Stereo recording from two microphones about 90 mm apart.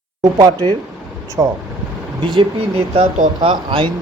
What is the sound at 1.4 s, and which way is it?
Speech, 35° right (ahead or behind).